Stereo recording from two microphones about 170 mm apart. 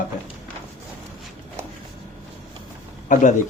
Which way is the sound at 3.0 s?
50° left (ahead or behind).